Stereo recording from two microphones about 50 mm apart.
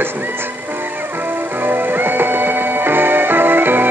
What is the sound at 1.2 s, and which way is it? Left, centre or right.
Music, right.